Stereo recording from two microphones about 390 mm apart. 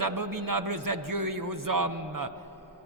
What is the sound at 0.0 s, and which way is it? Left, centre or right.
A man's voice, right.